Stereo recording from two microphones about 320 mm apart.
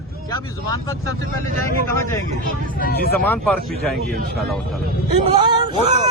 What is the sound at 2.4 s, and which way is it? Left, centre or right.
Speech, left.